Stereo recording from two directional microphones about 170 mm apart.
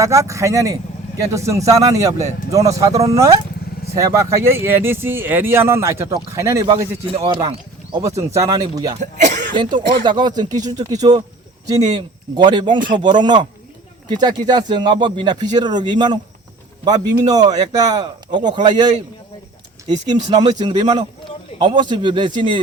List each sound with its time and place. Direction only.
0.0 s speech: 20° right (ahead or behind)
7.1 s speech: 35° right (ahead or behind)
7.9 s speech: 20° right (ahead or behind)
9.0 s speech: 45° right (ahead or behind)
9.6 s speech: 30° right (ahead or behind)
19.9 s speech: 40° right (ahead or behind)
20.6 s speech: 25° right (ahead or behind)